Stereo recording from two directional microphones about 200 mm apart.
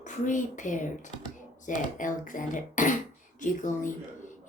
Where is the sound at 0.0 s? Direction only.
40° left (ahead or behind).